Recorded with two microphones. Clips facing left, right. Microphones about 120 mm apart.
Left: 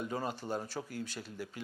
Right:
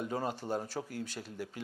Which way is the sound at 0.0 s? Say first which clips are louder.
Right 2 dB; 45° right (ahead or behind).